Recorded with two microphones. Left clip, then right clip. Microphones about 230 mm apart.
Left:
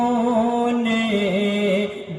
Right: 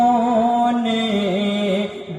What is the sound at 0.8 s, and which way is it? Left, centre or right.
Music, centre.